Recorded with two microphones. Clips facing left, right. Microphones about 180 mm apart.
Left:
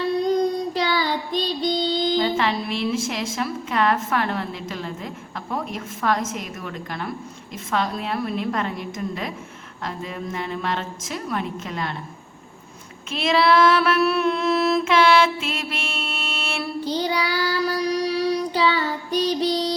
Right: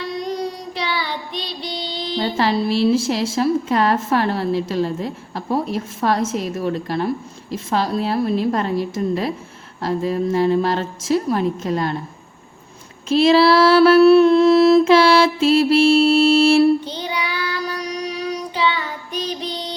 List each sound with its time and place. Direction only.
0.9 s child singing: 35° left (ahead or behind)
2.1 s mantra: 35° right (ahead or behind)
13.1 s mantra: 35° right (ahead or behind)
16.8 s child singing: 35° left (ahead or behind)